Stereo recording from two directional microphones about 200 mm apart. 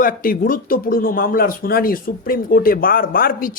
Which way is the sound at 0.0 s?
45° left (ahead or behind).